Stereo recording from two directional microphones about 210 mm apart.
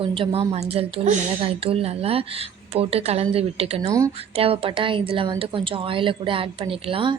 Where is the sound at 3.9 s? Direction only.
15° right (ahead or behind).